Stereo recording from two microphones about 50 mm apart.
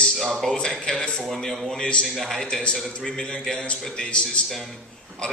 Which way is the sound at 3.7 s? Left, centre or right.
Left.